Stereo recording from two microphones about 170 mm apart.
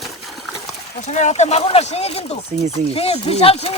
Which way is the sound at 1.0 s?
45° left (ahead or behind).